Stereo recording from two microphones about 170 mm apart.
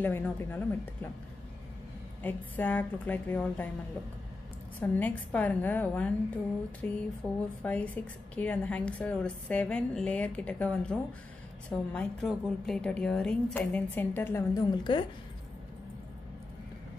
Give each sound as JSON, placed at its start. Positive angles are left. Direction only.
{"t": 0.0, "sound": "a woman's voice", "side_deg": 10}
{"t": 2.2, "sound": "a woman's voice", "side_deg": 10}
{"t": 4.7, "sound": "a woman's voice", "side_deg": 10}